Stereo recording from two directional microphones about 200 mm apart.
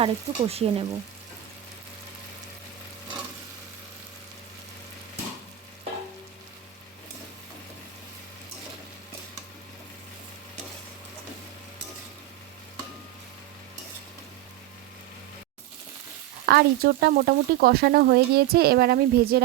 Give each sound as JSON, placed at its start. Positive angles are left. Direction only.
{"t": 0.0, "sound": "speech", "side_deg": -30}
{"t": 16.5, "sound": "speech", "side_deg": -50}